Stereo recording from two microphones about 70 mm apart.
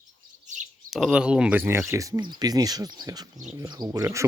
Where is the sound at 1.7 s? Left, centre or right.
Right.